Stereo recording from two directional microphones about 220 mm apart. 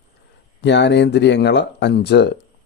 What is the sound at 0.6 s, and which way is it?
Speech, 50° left (ahead or behind).